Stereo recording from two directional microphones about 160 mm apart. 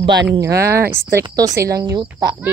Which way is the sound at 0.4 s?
20° right (ahead or behind).